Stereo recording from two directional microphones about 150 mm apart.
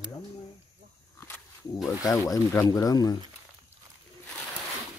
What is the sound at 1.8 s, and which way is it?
Speech, 20° left (ahead or behind).